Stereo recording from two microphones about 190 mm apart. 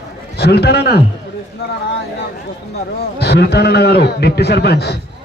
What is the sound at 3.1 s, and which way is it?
A man's voice, 60° left (ahead or behind).